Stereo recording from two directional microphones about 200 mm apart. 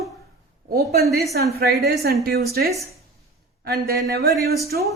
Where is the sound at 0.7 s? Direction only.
50° right (ahead or behind).